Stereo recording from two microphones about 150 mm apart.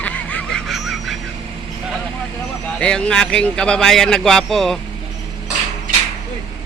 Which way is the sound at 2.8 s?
5° left (ahead or behind).